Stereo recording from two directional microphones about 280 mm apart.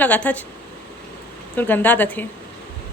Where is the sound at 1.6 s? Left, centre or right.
Centre.